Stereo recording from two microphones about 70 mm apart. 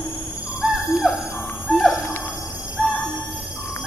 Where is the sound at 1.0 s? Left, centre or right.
Centre.